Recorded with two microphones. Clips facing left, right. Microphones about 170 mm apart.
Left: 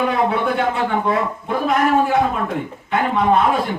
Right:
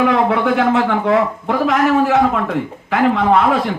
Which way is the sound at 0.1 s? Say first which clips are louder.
Right 4 dB; 75° right (ahead or behind).